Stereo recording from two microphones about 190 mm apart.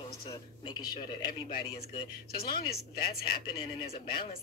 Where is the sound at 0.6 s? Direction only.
20° left (ahead or behind).